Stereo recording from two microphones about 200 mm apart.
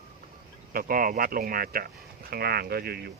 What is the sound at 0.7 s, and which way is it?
Speech, 45° right (ahead or behind).